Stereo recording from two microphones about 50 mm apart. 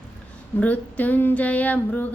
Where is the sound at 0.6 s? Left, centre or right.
Left.